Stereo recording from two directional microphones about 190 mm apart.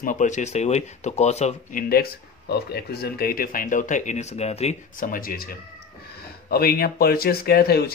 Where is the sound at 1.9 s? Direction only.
55° left (ahead or behind).